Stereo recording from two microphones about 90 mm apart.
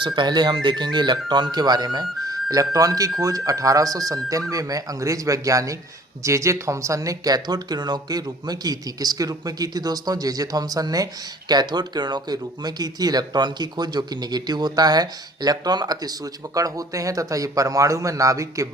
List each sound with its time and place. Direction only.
0.0 s speech: 60° right (ahead or behind); by 18.7 s 35° right (ahead or behind)